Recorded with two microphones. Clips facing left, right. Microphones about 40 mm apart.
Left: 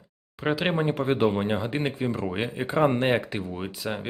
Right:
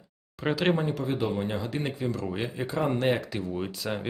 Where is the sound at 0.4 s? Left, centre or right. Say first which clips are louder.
Even; centre.